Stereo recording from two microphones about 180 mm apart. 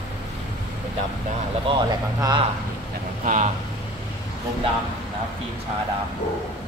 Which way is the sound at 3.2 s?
45° right (ahead or behind).